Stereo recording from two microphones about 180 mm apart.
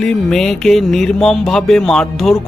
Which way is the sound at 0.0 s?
5° left (ahead or behind).